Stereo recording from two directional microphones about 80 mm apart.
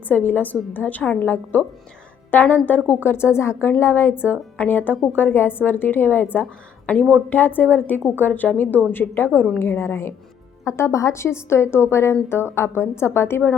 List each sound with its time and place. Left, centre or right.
0.1 s a woman's voice: left